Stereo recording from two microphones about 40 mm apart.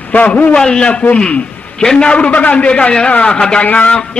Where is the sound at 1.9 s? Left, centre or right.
Left.